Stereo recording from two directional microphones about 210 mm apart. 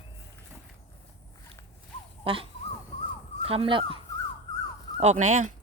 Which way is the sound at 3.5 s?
25° right (ahead or behind).